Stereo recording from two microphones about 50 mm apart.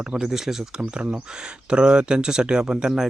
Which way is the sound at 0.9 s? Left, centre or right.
Right.